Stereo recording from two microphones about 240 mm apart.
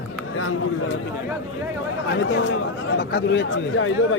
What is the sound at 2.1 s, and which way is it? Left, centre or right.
Speech, left.